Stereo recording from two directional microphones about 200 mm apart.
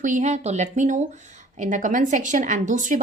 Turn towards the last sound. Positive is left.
turn(degrees=-40)  # may be behind; listen again after turning